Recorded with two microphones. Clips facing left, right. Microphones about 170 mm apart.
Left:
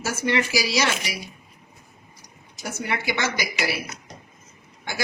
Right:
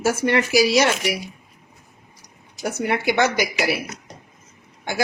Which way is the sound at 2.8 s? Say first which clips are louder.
Right 7 dB; 60° right (ahead or behind).